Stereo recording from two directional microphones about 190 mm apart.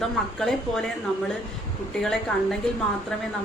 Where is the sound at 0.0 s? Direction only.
Centre (ahead or behind).